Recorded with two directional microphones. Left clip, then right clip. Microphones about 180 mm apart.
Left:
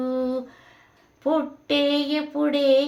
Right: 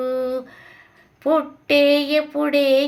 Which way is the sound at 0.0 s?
20° right (ahead or behind).